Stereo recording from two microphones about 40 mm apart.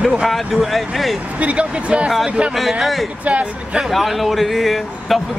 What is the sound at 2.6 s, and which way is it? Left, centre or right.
Speech, centre.